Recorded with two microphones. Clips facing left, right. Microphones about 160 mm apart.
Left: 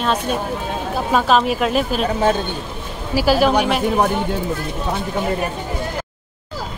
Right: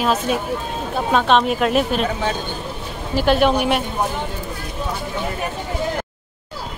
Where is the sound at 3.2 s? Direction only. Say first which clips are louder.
Left 1 dB; centre (ahead or behind).